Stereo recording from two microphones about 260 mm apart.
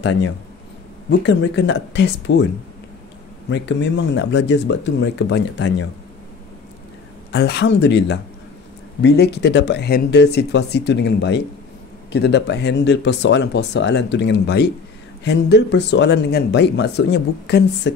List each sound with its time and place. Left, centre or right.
0.0 s speech: left
3.4 s speech: left
7.3 s speech: left